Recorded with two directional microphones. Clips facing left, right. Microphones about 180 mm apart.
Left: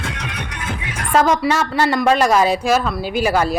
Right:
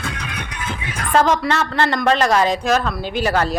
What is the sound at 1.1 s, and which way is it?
A woman's voice, 10° left (ahead or behind).